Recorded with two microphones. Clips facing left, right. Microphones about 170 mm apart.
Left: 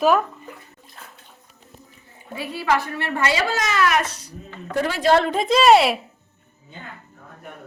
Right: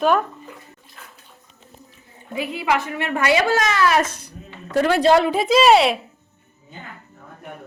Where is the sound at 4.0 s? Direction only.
55° right (ahead or behind).